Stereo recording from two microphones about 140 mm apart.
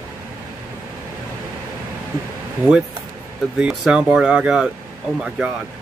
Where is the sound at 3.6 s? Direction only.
5° right (ahead or behind).